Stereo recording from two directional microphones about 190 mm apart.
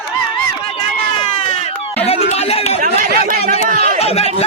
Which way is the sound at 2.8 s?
45° right (ahead or behind).